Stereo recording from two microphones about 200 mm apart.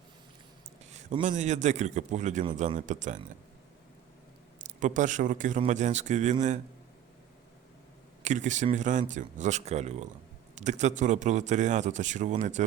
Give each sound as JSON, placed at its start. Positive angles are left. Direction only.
{"t": 0.9, "sound": "a man's voice", "side_deg": -35}
{"t": 4.8, "sound": "a man's voice", "side_deg": -40}
{"t": 8.2, "sound": "a man's voice", "side_deg": -35}